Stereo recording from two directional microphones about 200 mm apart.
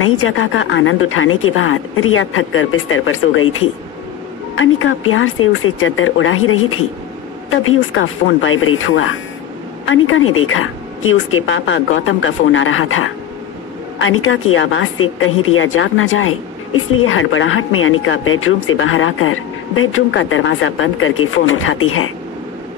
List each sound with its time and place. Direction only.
0.0 s speech: 85° left
13.9 s speech: 80° left